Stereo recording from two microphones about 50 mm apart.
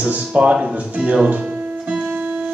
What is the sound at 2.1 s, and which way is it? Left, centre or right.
Music, right.